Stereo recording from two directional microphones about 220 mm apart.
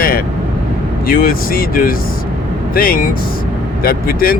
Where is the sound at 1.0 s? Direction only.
40° left (ahead or behind).